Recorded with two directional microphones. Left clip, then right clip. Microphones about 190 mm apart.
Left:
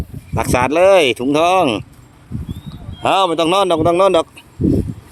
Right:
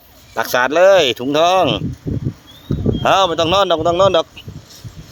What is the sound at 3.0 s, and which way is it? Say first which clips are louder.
Speech: even; 15° left (ahead or behind).